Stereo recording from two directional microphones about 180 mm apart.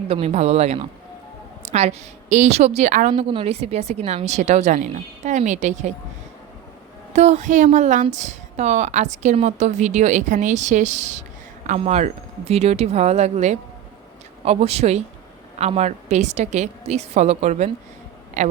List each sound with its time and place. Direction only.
0.1 s a woman's voice: 35° right (ahead or behind)
7.1 s a woman's voice: 40° right (ahead or behind)